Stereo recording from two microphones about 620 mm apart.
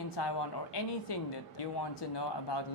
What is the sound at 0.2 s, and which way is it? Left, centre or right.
A man's voice, left.